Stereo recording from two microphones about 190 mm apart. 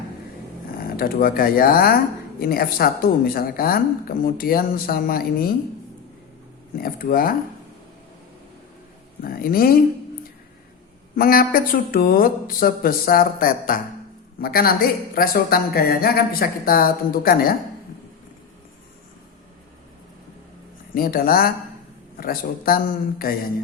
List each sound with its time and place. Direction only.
0.9 s speech: 50° left (ahead or behind)
6.7 s speech: 50° left (ahead or behind)
9.2 s speech: 50° left (ahead or behind)
11.2 s speech: 50° left (ahead or behind)
20.9 s speech: 50° left (ahead or behind)